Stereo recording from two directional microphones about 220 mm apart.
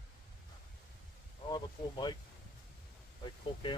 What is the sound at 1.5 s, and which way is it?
Speech, 20° left (ahead or behind).